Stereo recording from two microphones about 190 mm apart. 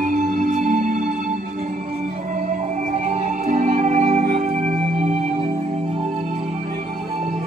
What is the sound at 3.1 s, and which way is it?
Music, 40° right (ahead or behind).